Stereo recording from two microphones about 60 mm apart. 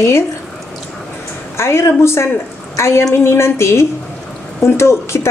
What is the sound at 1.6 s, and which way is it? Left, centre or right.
A woman's voice, left.